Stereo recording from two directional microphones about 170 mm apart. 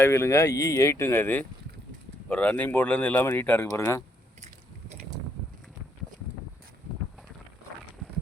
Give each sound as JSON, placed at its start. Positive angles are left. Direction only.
{"t": 0.0, "sound": "speech", "side_deg": 15}
{"t": 4.4, "sound": "gears", "side_deg": -45}